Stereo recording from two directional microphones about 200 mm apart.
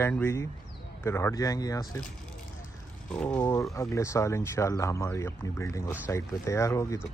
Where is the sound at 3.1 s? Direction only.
5° left (ahead or behind).